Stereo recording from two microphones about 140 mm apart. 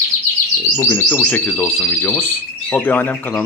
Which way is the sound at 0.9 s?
15° left (ahead or behind).